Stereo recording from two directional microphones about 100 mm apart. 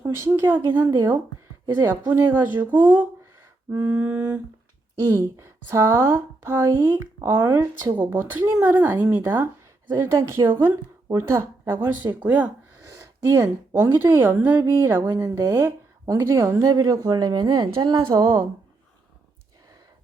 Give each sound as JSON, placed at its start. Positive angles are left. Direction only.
{"t": 0.0, "sound": "a woman's voice", "side_deg": -20}
{"t": 3.7, "sound": "a sound", "side_deg": -25}
{"t": 5.0, "sound": "a woman's voice", "side_deg": -30}